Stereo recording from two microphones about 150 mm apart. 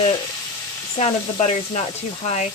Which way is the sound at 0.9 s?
45° left (ahead or behind).